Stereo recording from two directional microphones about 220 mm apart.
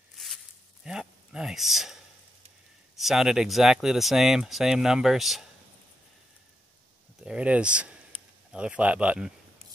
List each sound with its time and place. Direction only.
0.1 s a sound: centre (ahead or behind)
0.8 s speech: 5° right (ahead or behind)
3.0 s speech: centre (ahead or behind)
7.2 s speech: 5° right (ahead or behind)
8.1 s a sound: 25° right (ahead or behind)
8.5 s speech: 5° right (ahead or behind)